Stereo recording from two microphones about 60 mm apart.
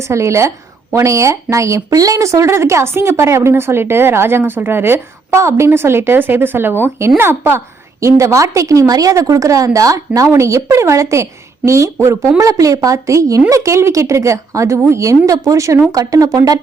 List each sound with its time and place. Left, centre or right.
0.0 s a woman's voice: right
8.0 s a woman's voice: right
12.4 s a woman's voice: right
15.9 s speech: right